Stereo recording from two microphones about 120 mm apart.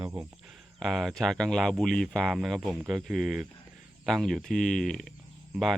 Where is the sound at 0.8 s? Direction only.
Centre (ahead or behind).